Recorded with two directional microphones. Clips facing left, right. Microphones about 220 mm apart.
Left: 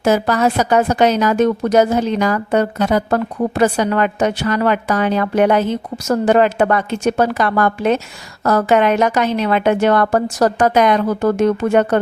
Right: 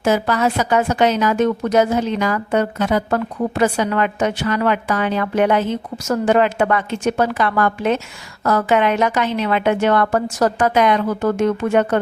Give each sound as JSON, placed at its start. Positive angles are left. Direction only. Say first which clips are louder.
{"t": 0.0, "sound": "a woman's voice", "louder": "left 2 dB", "side_deg": 40}